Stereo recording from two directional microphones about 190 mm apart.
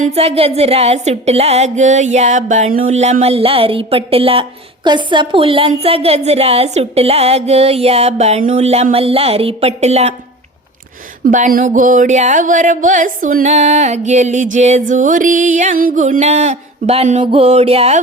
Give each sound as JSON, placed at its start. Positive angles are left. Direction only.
{"t": 0.0, "sound": "music", "side_deg": -30}
{"t": 11.3, "sound": "music", "side_deg": -45}